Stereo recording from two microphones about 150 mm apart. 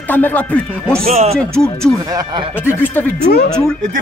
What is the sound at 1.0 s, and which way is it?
Speech, 45° right (ahead or behind).